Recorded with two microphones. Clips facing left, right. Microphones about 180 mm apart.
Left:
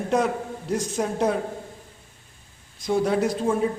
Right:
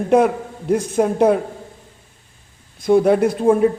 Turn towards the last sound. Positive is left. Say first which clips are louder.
# right 8 dB
turn(degrees=-55)  # may be behind; listen again after turning